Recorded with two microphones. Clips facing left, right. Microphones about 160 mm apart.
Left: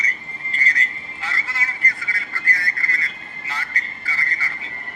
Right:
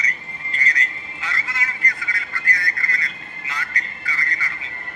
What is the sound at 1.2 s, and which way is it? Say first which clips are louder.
Speech: even; 35° left (ahead or behind).